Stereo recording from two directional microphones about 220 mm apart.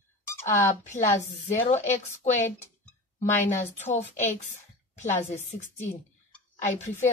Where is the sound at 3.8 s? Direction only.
30° left (ahead or behind).